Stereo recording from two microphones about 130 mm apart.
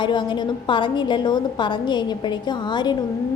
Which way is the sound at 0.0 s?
35° left (ahead or behind).